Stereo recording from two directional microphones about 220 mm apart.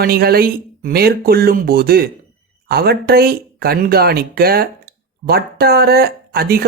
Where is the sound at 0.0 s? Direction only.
45° right (ahead or behind).